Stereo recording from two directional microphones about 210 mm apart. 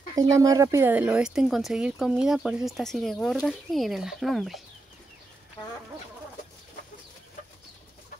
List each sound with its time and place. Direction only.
0.1 s speech: 15° right (ahead or behind); by 4.6 s centre (ahead or behind)